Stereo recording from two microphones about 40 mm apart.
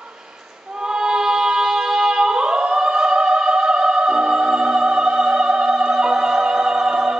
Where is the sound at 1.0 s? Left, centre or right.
Centre.